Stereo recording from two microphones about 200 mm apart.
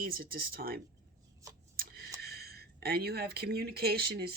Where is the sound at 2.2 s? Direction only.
50° right (ahead or behind).